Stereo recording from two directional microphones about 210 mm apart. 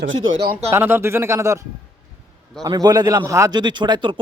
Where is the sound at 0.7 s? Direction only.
10° right (ahead or behind).